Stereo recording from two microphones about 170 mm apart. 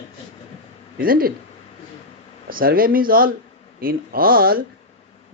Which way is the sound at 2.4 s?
60° right (ahead or behind).